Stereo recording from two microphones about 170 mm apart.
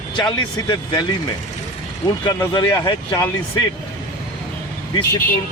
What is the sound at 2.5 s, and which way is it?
Speech, 25° left (ahead or behind).